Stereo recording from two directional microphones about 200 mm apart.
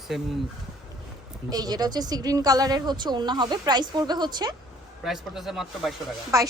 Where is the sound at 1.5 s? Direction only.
20° right (ahead or behind).